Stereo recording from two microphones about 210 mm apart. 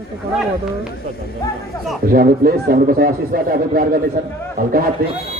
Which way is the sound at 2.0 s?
45° right (ahead or behind).